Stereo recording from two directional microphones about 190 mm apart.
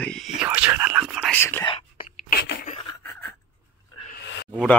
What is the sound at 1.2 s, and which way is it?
Speech, 10° left (ahead or behind).